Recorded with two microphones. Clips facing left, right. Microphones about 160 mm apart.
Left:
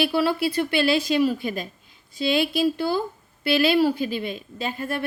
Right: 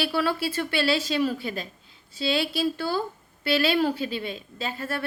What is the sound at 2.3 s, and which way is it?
A woman's voice, 15° left (ahead or behind).